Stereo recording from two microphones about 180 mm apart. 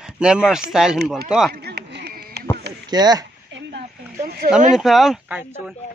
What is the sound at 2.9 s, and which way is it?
Speech, 20° right (ahead or behind).